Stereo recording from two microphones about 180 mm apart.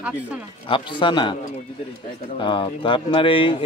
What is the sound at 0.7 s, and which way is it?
Speech, 30° left (ahead or behind).